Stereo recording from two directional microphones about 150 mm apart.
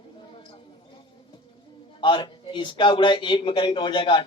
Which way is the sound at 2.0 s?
30° left (ahead or behind).